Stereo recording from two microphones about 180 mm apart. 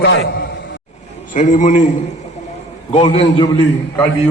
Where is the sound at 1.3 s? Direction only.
45° left (ahead or behind).